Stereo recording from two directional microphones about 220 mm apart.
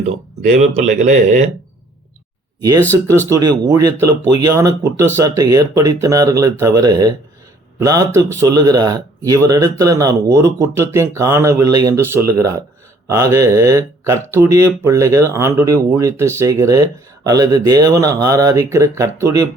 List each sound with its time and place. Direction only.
0.0 s speech: 30° right (ahead or behind)
2.6 s speech: 15° right (ahead or behind)